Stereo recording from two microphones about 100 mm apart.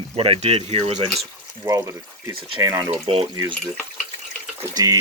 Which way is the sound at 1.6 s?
35° right (ahead or behind).